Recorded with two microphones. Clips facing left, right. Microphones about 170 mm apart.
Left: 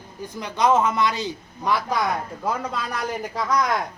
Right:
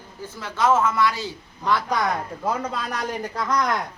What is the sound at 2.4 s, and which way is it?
Speech, centre (ahead or behind).